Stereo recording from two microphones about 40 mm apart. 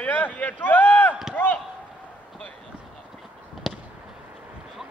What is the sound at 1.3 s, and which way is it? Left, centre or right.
Run, left.